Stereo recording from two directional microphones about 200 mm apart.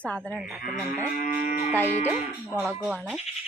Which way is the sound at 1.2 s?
40° left (ahead or behind).